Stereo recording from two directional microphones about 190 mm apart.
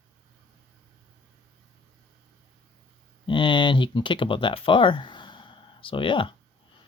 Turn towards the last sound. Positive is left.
turn(degrees=25)  # may be behind; listen again after turning